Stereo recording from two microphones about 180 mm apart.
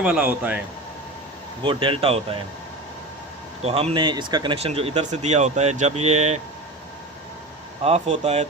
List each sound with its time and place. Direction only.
0.0 s a man's voice: 5° right (ahead or behind)
1.6 s speech: 30° right (ahead or behind)
3.6 s speech: 35° right (ahead or behind)
7.9 s speech: 35° right (ahead or behind)